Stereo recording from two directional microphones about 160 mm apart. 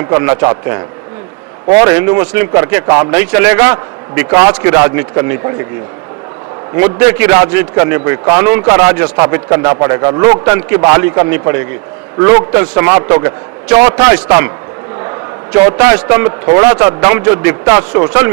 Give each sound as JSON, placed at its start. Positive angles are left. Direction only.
{"t": 0.1, "sound": "a man's voice", "side_deg": -20}
{"t": 6.7, "sound": "a man's voice", "side_deg": -15}
{"t": 15.5, "sound": "a man's voice", "side_deg": -15}